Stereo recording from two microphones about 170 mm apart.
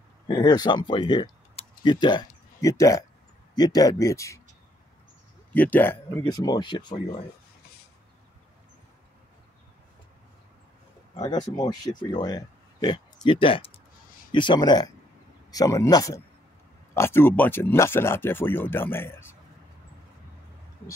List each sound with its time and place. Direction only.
0.3 s speech: 25° left (ahead or behind)
5.5 s speech: 10° left (ahead or behind)
6.2 s speech: 25° left (ahead or behind)
11.1 s speech: 25° left (ahead or behind)